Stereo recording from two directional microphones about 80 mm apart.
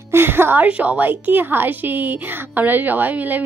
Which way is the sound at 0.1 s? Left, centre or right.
Right.